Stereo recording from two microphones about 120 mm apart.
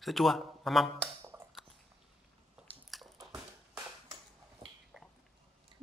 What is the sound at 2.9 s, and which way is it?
Biting, centre (ahead or behind).